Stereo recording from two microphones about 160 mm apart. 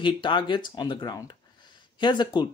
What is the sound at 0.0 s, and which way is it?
Speech, 30° left (ahead or behind).